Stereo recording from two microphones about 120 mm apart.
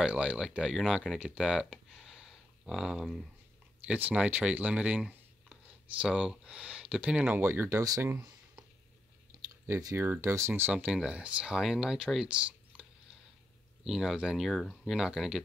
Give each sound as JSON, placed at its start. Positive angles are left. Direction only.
{"t": 0.0, "sound": "speech", "side_deg": -10}
{"t": 9.7, "sound": "speech", "side_deg": -25}
{"t": 13.8, "sound": "speech", "side_deg": -5}